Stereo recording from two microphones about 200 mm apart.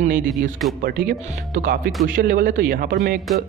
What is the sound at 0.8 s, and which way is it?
Speech, 50° right (ahead or behind).